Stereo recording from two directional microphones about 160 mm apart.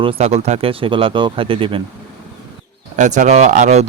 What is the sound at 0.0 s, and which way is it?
Speech, 35° right (ahead or behind).